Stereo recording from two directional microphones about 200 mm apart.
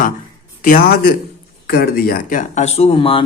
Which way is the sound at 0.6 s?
45° left (ahead or behind).